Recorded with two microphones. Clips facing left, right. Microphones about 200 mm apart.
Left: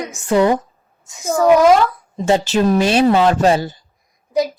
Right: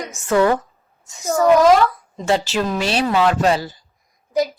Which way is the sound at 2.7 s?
50° left (ahead or behind).